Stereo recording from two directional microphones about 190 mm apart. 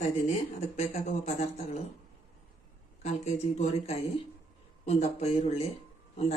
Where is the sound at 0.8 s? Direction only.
35° left (ahead or behind).